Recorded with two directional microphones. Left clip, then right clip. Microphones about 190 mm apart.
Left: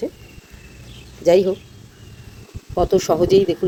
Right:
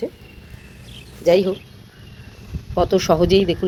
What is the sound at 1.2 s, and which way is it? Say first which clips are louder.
Speech: left 1 dB; 5° left (ahead or behind).